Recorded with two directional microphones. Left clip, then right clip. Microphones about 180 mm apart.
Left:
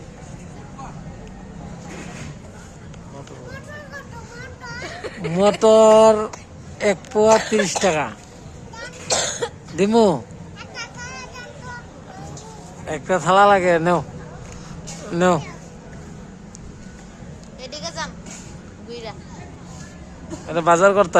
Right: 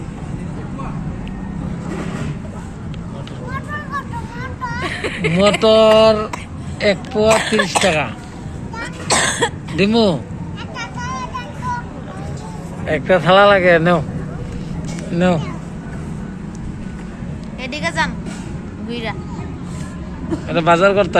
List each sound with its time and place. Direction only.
4.8 s a sound: 10° left (ahead or behind)
5.5 s speech: 35° left (ahead or behind)
7.3 s speech: 5° left (ahead or behind)
7.9 s speech: 35° left (ahead or behind)
9.0 s cough: 10° left (ahead or behind)
9.7 s speech: 35° left (ahead or behind)
12.8 s speech: 20° left (ahead or behind)
15.1 s speech: 40° left (ahead or behind)
17.6 s a sound: 10° left (ahead or behind)
18.9 s speech: 10° left (ahead or behind)
20.5 s speech: 30° left (ahead or behind)